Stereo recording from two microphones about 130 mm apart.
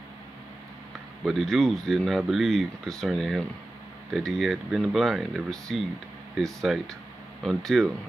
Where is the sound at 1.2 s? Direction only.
Centre (ahead or behind).